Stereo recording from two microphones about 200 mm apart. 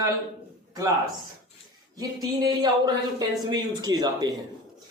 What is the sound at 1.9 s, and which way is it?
Speech, 20° right (ahead or behind).